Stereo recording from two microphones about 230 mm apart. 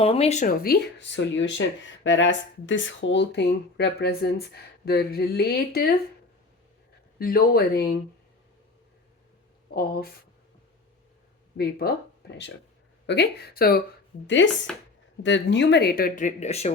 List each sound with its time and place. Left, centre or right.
0.0 s speech: left
7.2 s speech: left
9.7 s a sound: left
11.5 s speech: left
13.1 s speech: left
14.3 s speech: left